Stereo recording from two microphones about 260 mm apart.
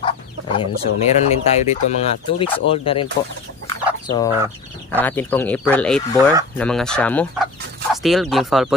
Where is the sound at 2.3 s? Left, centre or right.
Left.